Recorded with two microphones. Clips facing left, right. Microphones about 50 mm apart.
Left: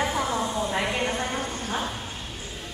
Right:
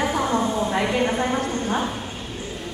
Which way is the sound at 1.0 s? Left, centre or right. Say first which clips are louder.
Right 6 dB; centre.